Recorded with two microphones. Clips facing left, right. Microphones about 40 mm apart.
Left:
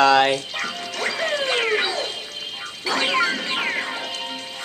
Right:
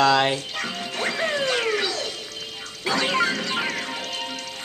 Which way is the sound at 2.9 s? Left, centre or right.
Left.